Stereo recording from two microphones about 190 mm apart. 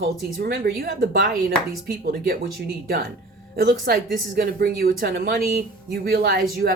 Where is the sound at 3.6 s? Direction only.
55° right (ahead or behind).